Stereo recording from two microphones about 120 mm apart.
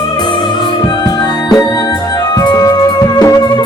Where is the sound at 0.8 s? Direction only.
35° left (ahead or behind).